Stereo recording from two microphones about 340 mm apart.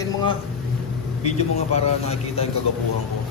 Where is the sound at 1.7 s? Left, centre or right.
Centre.